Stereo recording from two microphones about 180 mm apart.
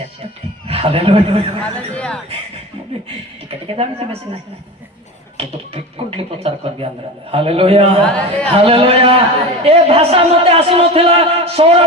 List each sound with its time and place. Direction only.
0.7 s a man's voice: 30° right (ahead or behind)
1.6 s a sound: 5° left (ahead or behind)
3.7 s speech: 30° right (ahead or behind)
5.4 s speech: 30° right (ahead or behind)
8.0 s speech: 5° left (ahead or behind)
8.4 s speech: 30° right (ahead or behind)